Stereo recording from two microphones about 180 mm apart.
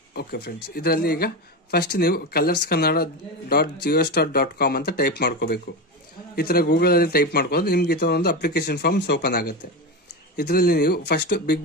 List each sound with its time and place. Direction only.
0.1 s speech: 65° left (ahead or behind)